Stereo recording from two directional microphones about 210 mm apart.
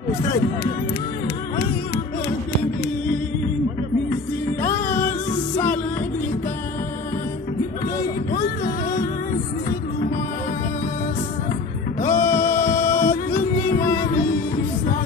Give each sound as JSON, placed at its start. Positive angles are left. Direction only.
{"t": 4.6, "sound": "music", "side_deg": 40}
{"t": 8.3, "sound": "music", "side_deg": 40}
{"t": 12.0, "sound": "music", "side_deg": 15}
{"t": 13.1, "sound": "music", "side_deg": 40}
{"t": 13.7, "sound": "music", "side_deg": 15}